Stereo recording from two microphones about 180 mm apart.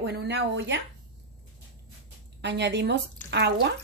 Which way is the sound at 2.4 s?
75° right (ahead or behind).